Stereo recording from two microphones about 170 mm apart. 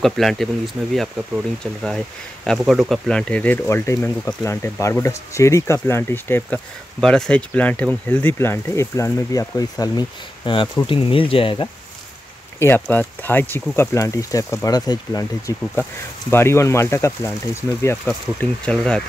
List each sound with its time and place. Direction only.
0.0 s speech: centre (ahead or behind); by 11.7 s 30° left (ahead or behind)
12.5 s speech: 10° left (ahead or behind)
15.7 s speech: 10° left (ahead or behind)